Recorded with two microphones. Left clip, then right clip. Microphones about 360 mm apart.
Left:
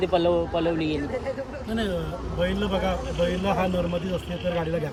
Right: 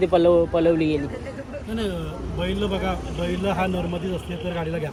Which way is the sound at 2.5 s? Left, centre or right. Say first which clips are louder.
Even; centre.